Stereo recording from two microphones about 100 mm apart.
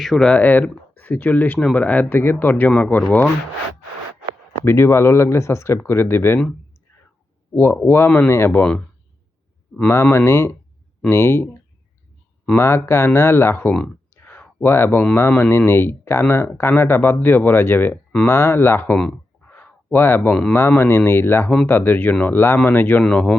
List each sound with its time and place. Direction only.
0.0 s speech: 5° left (ahead or behind)
4.6 s speech: 25° left (ahead or behind)
7.5 s speech: 20° left (ahead or behind)
9.7 s speech: 20° left (ahead or behind)
12.5 s speech: 25° left (ahead or behind)
18.9 s a sound: 10° left (ahead or behind)
20.5 s speech: 20° left (ahead or behind)